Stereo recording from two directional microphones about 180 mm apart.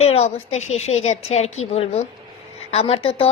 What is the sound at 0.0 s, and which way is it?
A woman's voice, 35° left (ahead or behind).